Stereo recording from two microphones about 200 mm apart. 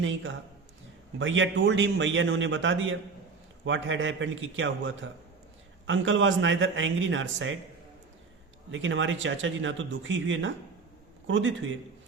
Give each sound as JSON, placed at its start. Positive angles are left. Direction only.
{"t": 0.0, "sound": "speech", "side_deg": -70}
{"t": 8.7, "sound": "speech", "side_deg": -70}